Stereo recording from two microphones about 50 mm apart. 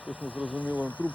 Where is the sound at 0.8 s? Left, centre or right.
Left.